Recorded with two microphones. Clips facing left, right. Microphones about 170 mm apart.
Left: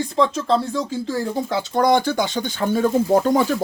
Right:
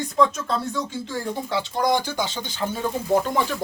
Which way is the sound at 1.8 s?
55° left (ahead or behind).